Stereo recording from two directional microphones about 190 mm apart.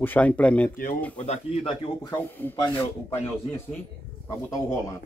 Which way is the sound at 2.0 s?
10° left (ahead or behind).